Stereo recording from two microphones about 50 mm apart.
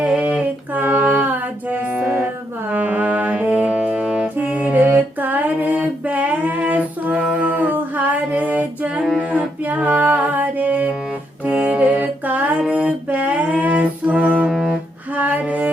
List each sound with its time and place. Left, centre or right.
0.0 s a sound: right
0.7 s female singing: right
1.7 s music: right
14.5 s music: centre
15.1 s music: right